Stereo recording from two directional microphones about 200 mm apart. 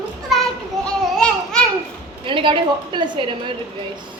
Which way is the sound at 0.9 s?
5° left (ahead or behind).